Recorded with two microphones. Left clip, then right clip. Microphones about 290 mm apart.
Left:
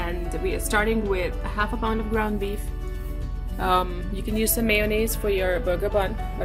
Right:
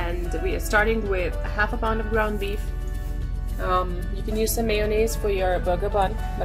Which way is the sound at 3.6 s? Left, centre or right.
Left.